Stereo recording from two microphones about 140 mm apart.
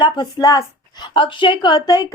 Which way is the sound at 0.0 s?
30° left (ahead or behind).